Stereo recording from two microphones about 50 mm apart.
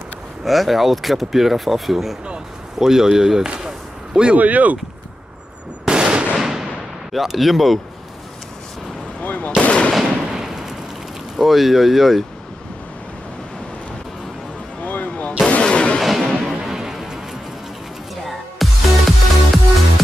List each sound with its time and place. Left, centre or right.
0.5 s speech: centre
4.4 s speech: right
5.9 s fireworks: centre
6.4 s artillery fire: centre
9.2 s machine gun: left
10.2 s a sound: centre
11.3 s speech: centre
14.8 s a sound: left
15.6 s artillery fire: left
16.0 s artillery fire: centre
16.6 s music: centre
18.6 s music: centre